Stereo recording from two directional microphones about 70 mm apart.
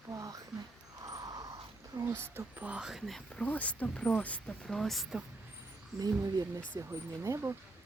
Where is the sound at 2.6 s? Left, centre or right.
Right.